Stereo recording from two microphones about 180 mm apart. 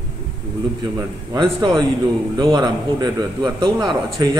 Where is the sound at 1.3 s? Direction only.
25° right (ahead or behind).